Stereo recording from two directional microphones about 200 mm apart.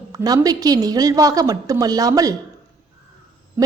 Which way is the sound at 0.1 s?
15° right (ahead or behind).